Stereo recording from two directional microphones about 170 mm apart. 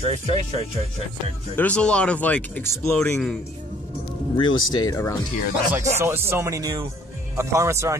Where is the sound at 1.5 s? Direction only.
10° left (ahead or behind).